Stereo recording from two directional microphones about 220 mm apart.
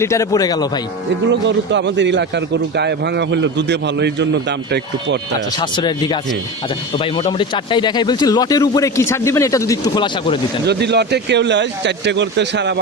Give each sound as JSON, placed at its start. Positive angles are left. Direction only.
{"t": 0.0, "sound": "speech", "side_deg": 15}
{"t": 1.3, "sound": "a man's voice", "side_deg": -55}
{"t": 5.5, "sound": "speech", "side_deg": 20}
{"t": 10.7, "sound": "a man's voice", "side_deg": -50}